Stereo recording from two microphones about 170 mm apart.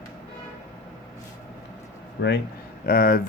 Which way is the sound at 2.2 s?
90° left.